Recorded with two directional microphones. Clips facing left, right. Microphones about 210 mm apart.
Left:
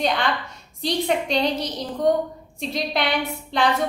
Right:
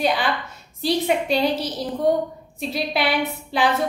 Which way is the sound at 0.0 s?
5° right (ahead or behind).